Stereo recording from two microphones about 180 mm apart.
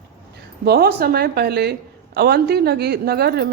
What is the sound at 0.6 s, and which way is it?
A woman's voice, 60° right (ahead or behind).